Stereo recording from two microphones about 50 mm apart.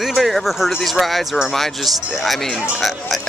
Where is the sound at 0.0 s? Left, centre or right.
Centre.